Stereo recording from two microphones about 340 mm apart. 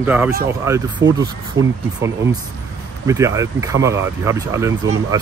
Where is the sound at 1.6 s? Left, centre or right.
Right.